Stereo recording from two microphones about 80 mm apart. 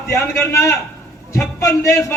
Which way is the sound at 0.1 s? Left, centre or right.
Left.